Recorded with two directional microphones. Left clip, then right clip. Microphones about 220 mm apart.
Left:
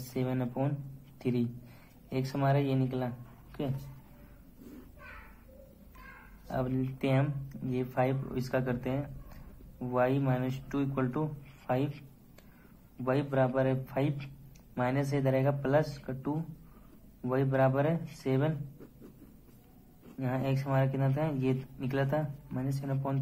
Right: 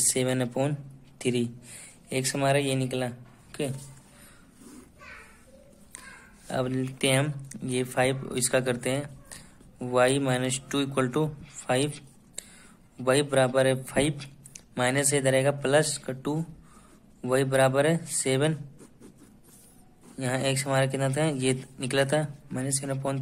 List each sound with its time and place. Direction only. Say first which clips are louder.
0.1 s a man's voice: right 2 dB; 40° right (ahead or behind)
6.4 s a man's voice: right 5 dB; 35° right (ahead or behind)
20.2 s a man's voice: right 6 dB; 40° right (ahead or behind)